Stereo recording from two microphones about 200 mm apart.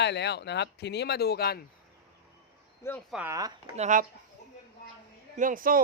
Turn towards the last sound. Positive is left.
turn(degrees=-45)  # may be behind; listen again after turning